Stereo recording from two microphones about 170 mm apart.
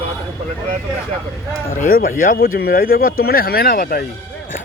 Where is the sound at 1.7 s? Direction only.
55° left (ahead or behind).